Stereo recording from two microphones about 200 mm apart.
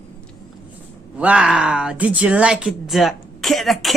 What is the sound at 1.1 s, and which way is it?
Speech, 5° right (ahead or behind).